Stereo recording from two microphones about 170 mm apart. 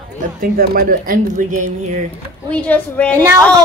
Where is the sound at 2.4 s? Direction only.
10° left (ahead or behind).